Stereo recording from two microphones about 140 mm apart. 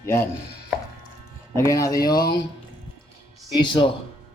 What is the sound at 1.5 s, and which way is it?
Speech, 20° left (ahead or behind).